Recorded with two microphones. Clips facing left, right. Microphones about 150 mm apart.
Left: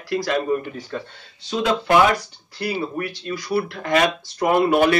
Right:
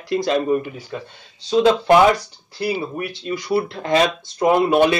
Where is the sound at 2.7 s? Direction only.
15° right (ahead or behind).